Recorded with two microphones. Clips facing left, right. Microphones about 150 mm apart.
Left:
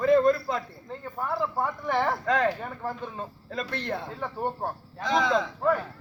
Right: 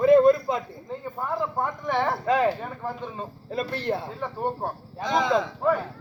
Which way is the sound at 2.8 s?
5° left (ahead or behind).